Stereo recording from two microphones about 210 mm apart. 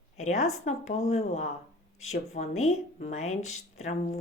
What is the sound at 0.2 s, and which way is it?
Speech, 30° left (ahead or behind).